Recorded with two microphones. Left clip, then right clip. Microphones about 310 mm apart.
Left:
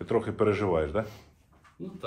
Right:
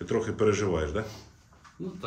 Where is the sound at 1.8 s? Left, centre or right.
Centre.